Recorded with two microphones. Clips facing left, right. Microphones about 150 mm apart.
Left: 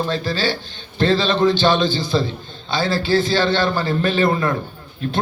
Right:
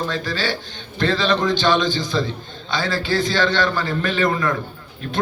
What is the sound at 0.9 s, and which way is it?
A man's voice, 25° left (ahead or behind).